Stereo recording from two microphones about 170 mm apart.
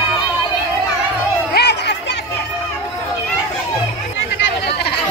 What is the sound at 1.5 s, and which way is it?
Chatter, 75° left (ahead or behind).